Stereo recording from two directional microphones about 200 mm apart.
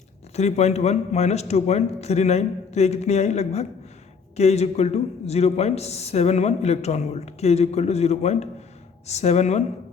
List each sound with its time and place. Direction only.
0.3 s speech: 35° left (ahead or behind)